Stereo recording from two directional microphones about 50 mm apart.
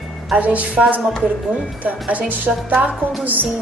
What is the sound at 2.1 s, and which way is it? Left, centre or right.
Speech, right.